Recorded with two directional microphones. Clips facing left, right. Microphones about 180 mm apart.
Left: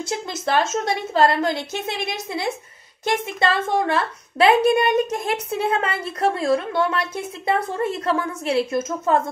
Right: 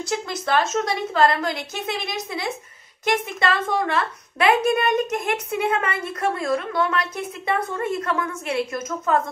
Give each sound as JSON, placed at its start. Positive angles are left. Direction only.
{"t": 0.0, "sound": "a woman's voice", "side_deg": 25}